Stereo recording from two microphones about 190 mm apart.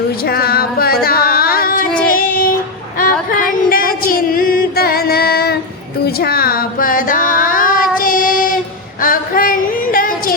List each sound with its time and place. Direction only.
0.3 s a sound: 55° left (ahead or behind)
1.0 s yodeling: 50° left (ahead or behind)
2.1 s child singing: 50° left (ahead or behind)
3.0 s a sound: 45° left (ahead or behind)
6.1 s music: 55° left (ahead or behind)
9.0 s female singing: 50° left (ahead or behind)